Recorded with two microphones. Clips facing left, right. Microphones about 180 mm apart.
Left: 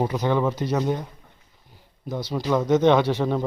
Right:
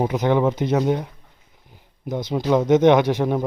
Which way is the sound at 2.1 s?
20° right (ahead or behind).